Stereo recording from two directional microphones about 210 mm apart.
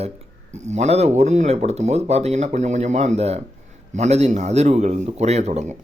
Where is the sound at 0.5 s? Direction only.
35° right (ahead or behind).